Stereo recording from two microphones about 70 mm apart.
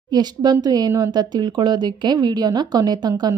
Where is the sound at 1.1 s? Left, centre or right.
Right.